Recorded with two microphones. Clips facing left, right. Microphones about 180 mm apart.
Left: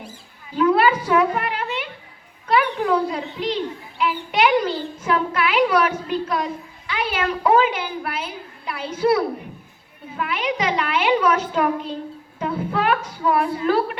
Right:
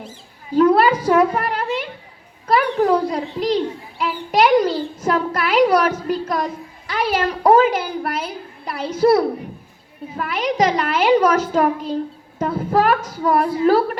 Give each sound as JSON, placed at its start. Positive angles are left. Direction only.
{"t": 0.5, "sound": "a child's voice", "side_deg": -40}
{"t": 2.5, "sound": "a sound", "side_deg": -40}
{"t": 6.8, "sound": "a woman's voice", "side_deg": -40}